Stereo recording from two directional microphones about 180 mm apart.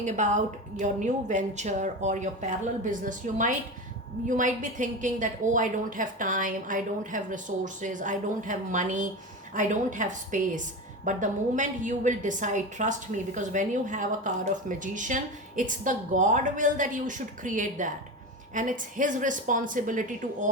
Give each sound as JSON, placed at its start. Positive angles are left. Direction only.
{"t": 0.0, "sound": "a woman's voice", "side_deg": -40}